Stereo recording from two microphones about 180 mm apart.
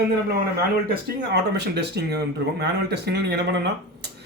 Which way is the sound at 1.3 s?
70° right (ahead or behind).